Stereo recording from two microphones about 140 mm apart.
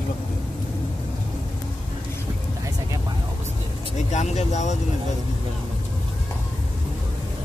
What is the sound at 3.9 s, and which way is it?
Speech, 55° left (ahead or behind).